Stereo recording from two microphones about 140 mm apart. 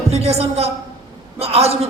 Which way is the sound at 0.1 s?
50° right (ahead or behind).